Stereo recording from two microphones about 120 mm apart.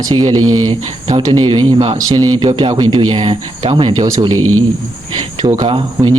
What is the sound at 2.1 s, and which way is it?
Speech, 35° right (ahead or behind).